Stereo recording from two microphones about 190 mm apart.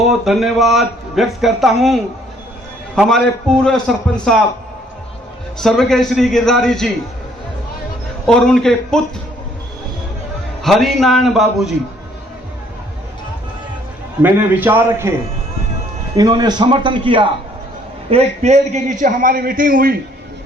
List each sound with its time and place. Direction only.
0.1 s speech: centre (ahead or behind)
5.5 s speech: centre (ahead or behind)
8.3 s speech: 5° left (ahead or behind)
10.6 s speech: centre (ahead or behind)
14.2 s a man's voice: 10° right (ahead or behind)
16.1 s a man's voice: 20° right (ahead or behind); by 20.0 s 50° right (ahead or behind)